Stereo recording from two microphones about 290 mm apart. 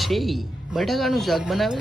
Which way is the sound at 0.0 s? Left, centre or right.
Centre.